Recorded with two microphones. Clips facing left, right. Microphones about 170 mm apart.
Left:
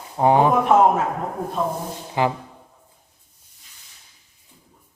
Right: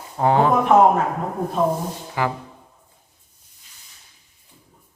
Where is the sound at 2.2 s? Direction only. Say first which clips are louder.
Left 3 dB; 20° left (ahead or behind).